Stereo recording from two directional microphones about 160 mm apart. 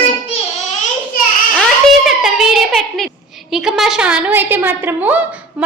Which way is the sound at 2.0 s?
Centre (ahead or behind).